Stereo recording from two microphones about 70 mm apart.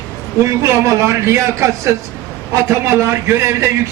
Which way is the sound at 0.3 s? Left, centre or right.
Right.